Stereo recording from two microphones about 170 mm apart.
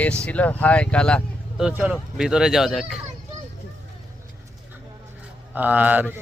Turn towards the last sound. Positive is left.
turn(degrees=-10)  # may be behind; listen again after turning